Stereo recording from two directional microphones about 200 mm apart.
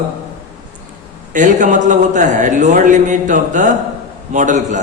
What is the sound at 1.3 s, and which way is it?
A man's voice, 40° right (ahead or behind).